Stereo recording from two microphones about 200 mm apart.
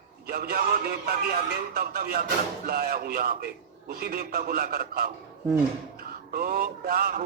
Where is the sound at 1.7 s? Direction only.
50° right (ahead or behind).